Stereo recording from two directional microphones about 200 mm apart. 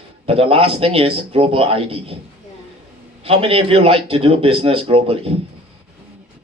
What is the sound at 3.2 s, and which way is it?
A man's voice, 30° right (ahead or behind).